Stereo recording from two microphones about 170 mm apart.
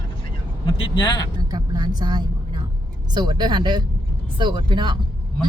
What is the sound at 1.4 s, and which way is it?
Speech, 20° right (ahead or behind).